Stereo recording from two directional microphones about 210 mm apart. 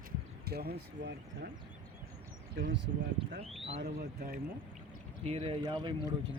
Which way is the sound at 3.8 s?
45° right (ahead or behind).